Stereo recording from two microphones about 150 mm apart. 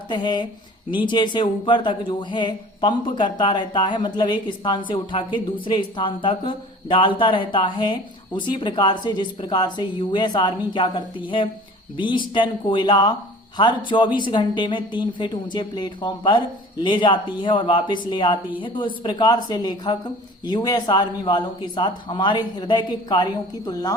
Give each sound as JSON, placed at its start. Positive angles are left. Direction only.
{"t": 0.1, "sound": "a woman's voice", "side_deg": 30}